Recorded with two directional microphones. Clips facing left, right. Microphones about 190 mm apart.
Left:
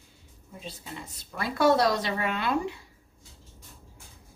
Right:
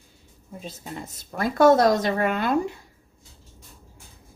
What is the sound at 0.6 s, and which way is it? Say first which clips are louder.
A woman's voice: right 4 dB; 45° right (ahead or behind).